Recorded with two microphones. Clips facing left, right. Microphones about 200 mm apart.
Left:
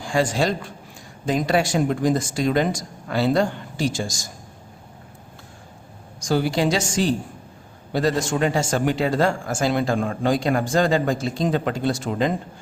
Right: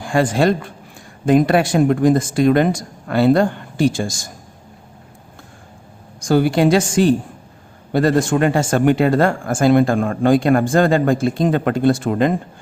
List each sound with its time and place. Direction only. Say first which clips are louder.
0.0 s speech: right 5 dB; 55° right (ahead or behind)
6.1 s speech: right 6 dB; 55° right (ahead or behind)